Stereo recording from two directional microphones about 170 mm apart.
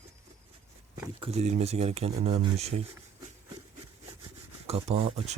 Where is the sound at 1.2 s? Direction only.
40° right (ahead or behind).